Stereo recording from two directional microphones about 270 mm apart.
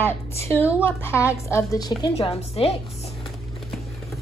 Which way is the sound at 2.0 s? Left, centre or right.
Left.